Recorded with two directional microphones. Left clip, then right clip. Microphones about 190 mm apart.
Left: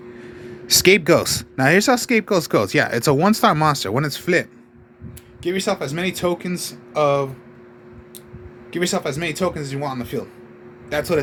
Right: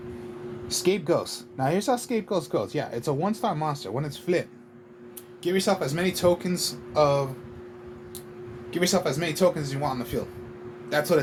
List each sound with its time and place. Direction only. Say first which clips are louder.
0.7 s speech: left 11 dB; 35° left (ahead or behind)
8.7 s speech: left 2 dB; 45° left (ahead or behind)